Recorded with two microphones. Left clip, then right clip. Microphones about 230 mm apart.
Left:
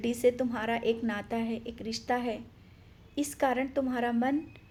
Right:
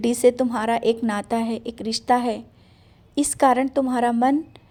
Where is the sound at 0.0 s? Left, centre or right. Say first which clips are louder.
Right 9 dB; right.